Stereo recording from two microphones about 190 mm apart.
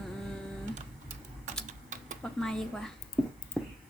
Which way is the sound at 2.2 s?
5° left (ahead or behind).